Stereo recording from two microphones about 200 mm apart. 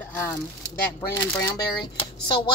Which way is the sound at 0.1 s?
10° left (ahead or behind).